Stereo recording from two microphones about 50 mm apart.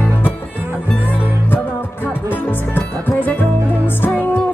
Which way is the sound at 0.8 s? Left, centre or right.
Left.